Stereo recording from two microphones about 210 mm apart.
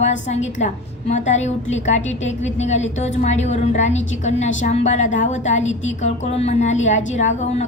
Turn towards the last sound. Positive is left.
turn(degrees=35)  # may be behind; listen again after turning